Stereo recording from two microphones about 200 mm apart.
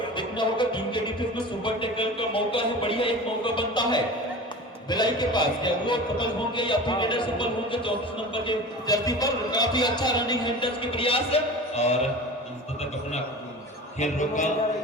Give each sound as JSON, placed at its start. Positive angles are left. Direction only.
{"t": 0.2, "sound": "music", "side_deg": 25}
{"t": 1.6, "sound": "a sound", "side_deg": 25}
{"t": 4.9, "sound": "a man's voice", "side_deg": 20}
{"t": 14.0, "sound": "a man's voice", "side_deg": 35}